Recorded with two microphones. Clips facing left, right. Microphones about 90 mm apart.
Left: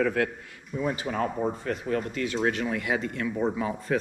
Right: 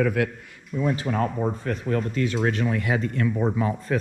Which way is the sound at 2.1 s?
35° right (ahead or behind).